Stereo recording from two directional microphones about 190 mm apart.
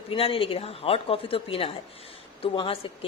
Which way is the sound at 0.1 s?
30° left (ahead or behind).